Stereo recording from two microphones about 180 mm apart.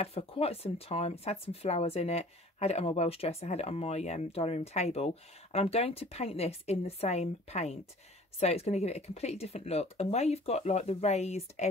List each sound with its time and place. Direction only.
0.0 s speech: 35° left (ahead or behind)